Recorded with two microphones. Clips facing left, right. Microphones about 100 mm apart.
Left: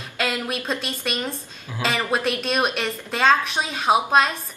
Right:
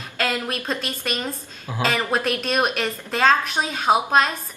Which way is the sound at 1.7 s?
50° right (ahead or behind).